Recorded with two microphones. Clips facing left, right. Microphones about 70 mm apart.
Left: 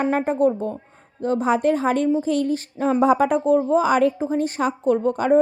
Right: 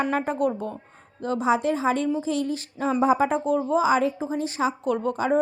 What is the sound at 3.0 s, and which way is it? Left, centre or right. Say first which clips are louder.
Speech: left 3 dB; left.